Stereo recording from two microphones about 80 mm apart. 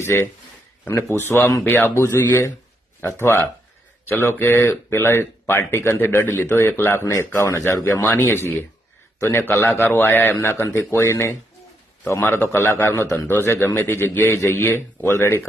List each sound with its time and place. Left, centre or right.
0.0 s speech: left
1.6 s speech: left